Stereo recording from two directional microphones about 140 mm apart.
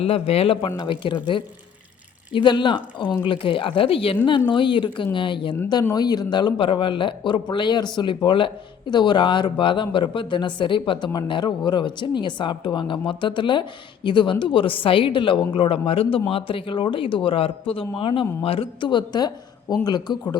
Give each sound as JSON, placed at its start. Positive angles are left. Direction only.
{"t": 0.0, "sound": "speech", "side_deg": 45}
{"t": 2.3, "sound": "speech", "side_deg": 35}